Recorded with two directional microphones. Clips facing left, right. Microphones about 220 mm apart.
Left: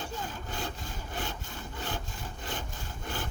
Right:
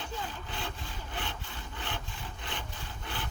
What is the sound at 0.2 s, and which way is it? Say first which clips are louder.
Sawing: left 2 dB; 45° left (ahead or behind).